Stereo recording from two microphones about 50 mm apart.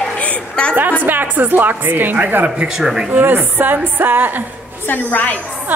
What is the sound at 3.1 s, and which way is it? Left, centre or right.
A woman's voice, right.